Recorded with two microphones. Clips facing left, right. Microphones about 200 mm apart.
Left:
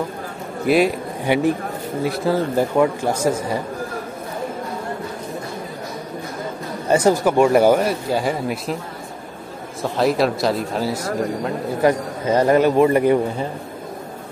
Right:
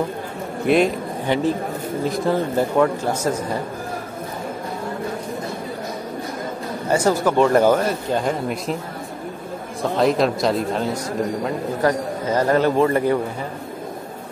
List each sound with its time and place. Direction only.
0.7 s a man's voice: 5° left (ahead or behind)
6.9 s speech: 15° left (ahead or behind)
9.8 s speech: centre (ahead or behind)
11.8 s speech: 20° left (ahead or behind)